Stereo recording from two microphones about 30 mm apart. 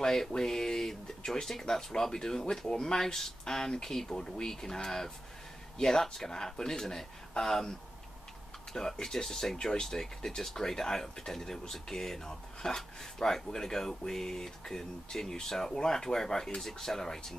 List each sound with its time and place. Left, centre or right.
0.0 s speech: centre
8.7 s speech: centre